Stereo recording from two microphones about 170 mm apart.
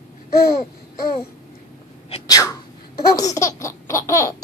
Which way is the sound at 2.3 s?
20° left (ahead or behind).